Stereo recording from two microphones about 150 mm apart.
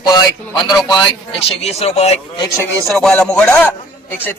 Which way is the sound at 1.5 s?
40° left (ahead or behind).